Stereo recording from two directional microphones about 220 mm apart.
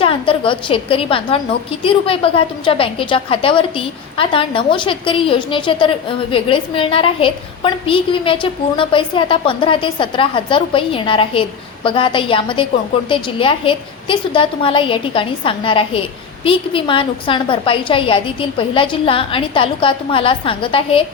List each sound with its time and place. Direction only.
0.0 s a woman's voice: 25° left (ahead or behind)